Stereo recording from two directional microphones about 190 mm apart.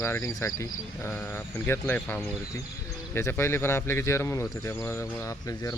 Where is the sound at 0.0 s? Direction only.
15° left (ahead or behind).